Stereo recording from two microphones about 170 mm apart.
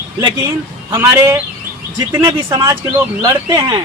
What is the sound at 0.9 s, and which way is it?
A man's voice, 15° right (ahead or behind).